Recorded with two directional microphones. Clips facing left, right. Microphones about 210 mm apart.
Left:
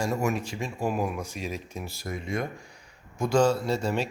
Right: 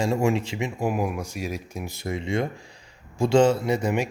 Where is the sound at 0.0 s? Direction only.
25° right (ahead or behind).